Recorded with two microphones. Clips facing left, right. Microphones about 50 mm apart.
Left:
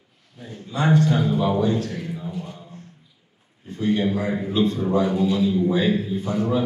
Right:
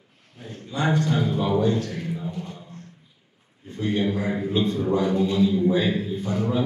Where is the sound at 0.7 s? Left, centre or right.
Left.